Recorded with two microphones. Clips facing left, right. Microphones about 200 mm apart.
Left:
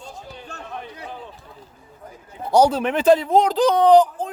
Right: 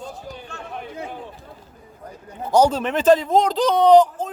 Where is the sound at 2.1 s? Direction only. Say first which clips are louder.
Even; 10° left (ahead or behind).